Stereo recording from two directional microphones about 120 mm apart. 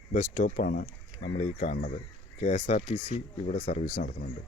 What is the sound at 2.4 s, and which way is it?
Speech, 60° left (ahead or behind).